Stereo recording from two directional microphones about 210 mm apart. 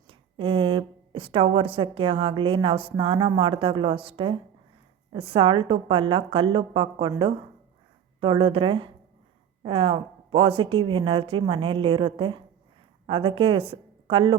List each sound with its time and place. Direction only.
0.1 s a woman's voice: 25° right (ahead or behind)